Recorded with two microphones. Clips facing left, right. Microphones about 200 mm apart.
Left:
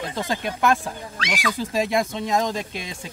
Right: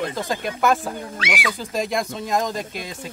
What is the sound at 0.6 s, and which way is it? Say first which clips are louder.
Speech: right 2 dB; centre (ahead or behind).